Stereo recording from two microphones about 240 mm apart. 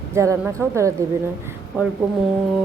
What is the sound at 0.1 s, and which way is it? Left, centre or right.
Speech, centre.